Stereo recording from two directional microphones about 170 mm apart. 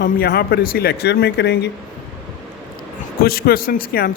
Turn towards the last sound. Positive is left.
turn(degrees=60)  # may be behind; listen again after turning